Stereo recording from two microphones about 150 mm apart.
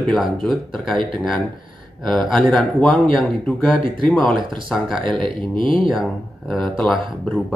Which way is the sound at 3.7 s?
35° right (ahead or behind).